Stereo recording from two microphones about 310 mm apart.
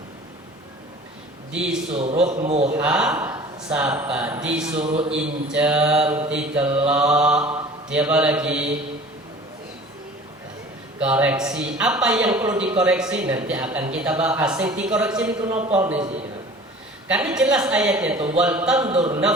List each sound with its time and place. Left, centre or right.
1.9 s a man's voice: centre
2.7 s a man's voice: centre
4.9 s a man's voice: centre
5.1 s a man's voice: centre
11.0 s a man's voice: centre
15.7 s a man's voice: centre
17.1 s a man's voice: centre
18.9 s a man's voice: centre